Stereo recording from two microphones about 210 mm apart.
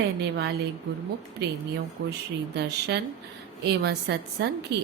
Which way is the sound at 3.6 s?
50° right (ahead or behind).